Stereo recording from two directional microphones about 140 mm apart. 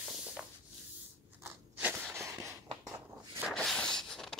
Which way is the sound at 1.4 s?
10° right (ahead or behind).